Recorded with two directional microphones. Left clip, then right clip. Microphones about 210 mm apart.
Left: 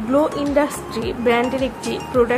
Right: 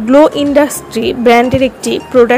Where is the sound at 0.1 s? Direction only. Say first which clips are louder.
Right 10 dB; 35° right (ahead or behind).